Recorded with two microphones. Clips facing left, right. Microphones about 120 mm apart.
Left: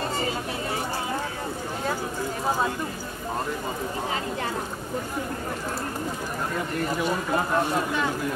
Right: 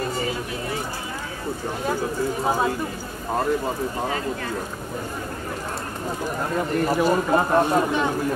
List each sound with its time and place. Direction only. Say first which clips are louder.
7.0 s speech: right 6 dB; 40° right (ahead or behind)